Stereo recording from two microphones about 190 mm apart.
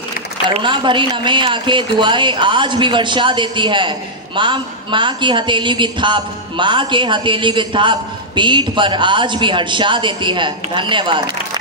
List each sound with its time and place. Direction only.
0.6 s a woman's voice: 25° right (ahead or behind)